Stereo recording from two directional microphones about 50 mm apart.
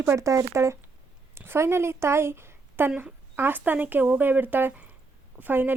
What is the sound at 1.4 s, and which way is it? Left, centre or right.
A woman's voice, right.